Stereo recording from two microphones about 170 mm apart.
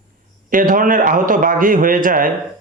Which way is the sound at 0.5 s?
55° right (ahead or behind).